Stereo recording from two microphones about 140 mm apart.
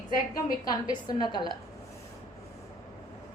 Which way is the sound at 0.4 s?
30° left (ahead or behind).